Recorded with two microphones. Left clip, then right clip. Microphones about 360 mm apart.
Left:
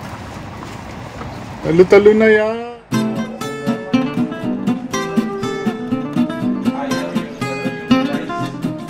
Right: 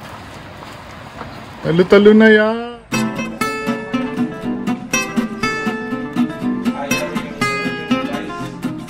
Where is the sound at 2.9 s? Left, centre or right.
Centre.